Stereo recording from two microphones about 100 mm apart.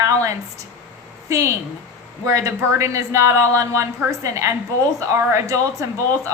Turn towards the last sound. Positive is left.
turn(degrees=-30)  # may be behind; listen again after turning